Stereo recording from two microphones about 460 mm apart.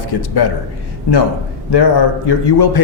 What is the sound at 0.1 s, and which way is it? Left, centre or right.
Speech, left.